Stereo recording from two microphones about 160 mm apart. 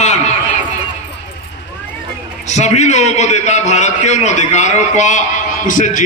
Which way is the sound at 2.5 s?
45° left (ahead or behind).